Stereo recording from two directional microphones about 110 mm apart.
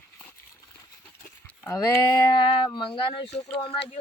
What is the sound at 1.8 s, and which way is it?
Speech, 30° left (ahead or behind).